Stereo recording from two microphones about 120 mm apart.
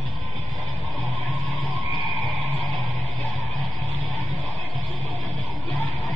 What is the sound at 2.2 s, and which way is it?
Music, centre (ahead or behind).